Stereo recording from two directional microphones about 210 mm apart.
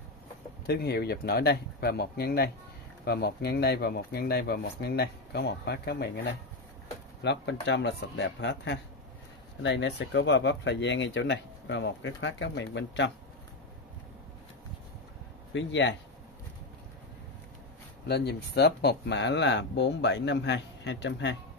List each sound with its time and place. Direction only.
0.7 s speech: 50° left (ahead or behind)
15.5 s speech: 60° left (ahead or behind)
18.0 s speech: 50° left (ahead or behind)